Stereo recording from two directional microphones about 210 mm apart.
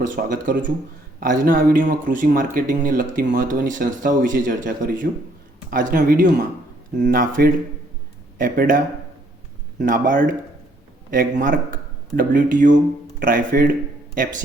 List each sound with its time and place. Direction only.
0.0 s speech: 40° right (ahead or behind)